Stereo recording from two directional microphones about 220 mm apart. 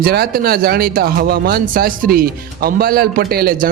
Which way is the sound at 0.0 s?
45° right (ahead or behind).